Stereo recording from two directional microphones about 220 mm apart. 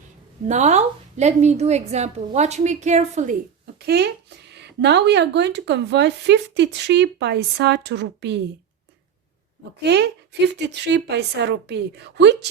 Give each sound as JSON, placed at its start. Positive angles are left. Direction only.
{"t": 0.4, "sound": "a woman's voice", "side_deg": -30}
{"t": 3.8, "sound": "speech", "side_deg": -50}
{"t": 9.8, "sound": "speech", "side_deg": -50}